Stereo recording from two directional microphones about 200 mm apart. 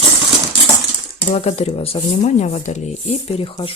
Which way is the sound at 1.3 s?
30° left (ahead or behind).